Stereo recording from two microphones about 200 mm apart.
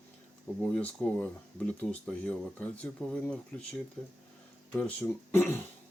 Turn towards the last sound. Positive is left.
turn(degrees=10)  # may be behind; listen again after turning